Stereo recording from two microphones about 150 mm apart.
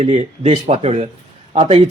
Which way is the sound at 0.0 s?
40° right (ahead or behind).